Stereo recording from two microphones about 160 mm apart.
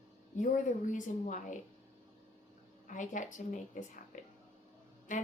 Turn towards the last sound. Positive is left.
turn(degrees=50)  # may be behind; listen again after turning